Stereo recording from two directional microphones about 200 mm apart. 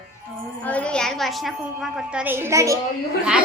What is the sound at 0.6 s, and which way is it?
Speech, 5° left (ahead or behind).